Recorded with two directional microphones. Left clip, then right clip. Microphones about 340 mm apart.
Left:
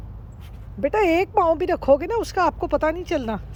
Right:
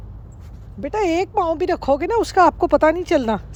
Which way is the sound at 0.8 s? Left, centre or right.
Centre.